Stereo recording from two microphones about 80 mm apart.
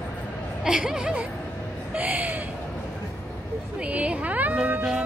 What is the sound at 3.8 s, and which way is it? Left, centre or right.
Music, centre.